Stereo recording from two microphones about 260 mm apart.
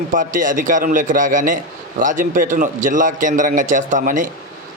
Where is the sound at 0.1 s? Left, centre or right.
Right.